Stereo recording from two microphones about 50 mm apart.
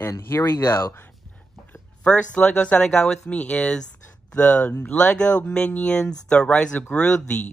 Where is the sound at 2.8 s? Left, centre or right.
Centre.